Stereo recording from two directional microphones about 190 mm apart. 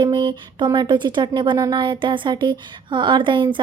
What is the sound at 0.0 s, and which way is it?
Speech, 25° right (ahead or behind).